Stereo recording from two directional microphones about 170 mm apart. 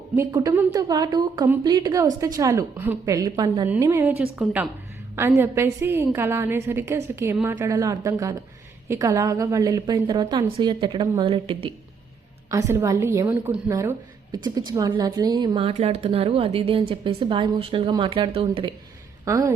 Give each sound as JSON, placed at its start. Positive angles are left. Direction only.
{"t": 0.2, "sound": "a woman's voice", "side_deg": -25}
{"t": 12.5, "sound": "a woman's voice", "side_deg": -20}
{"t": 19.2, "sound": "speech", "side_deg": -20}